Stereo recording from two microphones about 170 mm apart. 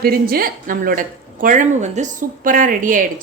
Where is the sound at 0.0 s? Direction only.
60° right (ahead or behind).